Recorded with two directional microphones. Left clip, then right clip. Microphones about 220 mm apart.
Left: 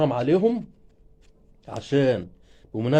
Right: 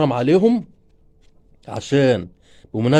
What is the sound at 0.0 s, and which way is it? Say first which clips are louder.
Speech: right 5 dB; 50° right (ahead or behind).